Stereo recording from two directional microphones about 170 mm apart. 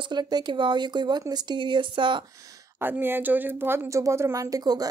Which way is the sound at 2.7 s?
10° right (ahead or behind).